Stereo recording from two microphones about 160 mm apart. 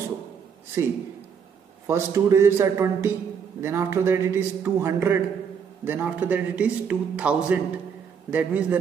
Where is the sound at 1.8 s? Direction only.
15° right (ahead or behind).